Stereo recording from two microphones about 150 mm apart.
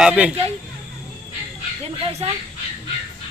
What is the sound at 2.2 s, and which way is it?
Speech, 45° right (ahead or behind).